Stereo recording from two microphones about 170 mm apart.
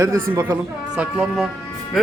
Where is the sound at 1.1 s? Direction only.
Centre (ahead or behind).